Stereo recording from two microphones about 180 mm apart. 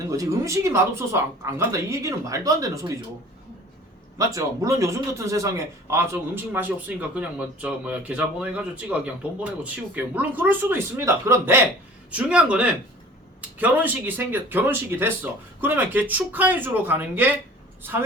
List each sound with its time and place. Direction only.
0.2 s speech: 15° right (ahead or behind)
4.2 s speech: 20° right (ahead or behind)